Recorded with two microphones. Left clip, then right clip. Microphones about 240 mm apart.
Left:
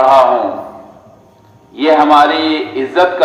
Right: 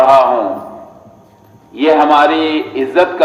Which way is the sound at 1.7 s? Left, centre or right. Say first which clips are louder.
Left 1 dB; right.